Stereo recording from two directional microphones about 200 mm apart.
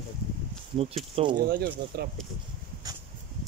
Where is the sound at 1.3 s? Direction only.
50° right (ahead or behind).